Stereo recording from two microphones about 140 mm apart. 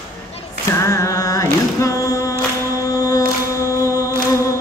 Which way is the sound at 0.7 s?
20° left (ahead or behind).